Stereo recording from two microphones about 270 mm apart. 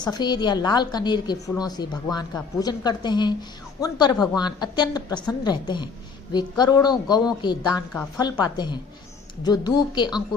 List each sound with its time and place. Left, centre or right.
0.1 s a woman's voice: centre